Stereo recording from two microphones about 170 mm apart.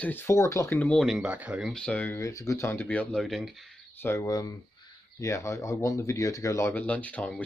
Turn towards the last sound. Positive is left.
turn(degrees=10)  # may be behind; listen again after turning